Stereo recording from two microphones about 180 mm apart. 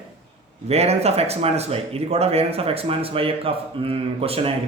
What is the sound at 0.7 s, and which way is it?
Speech, 35° right (ahead or behind).